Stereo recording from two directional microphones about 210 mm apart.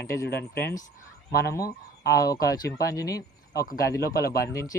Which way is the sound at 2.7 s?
15° left (ahead or behind).